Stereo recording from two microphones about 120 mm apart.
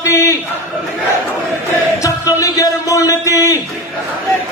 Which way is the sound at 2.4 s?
30° left (ahead or behind).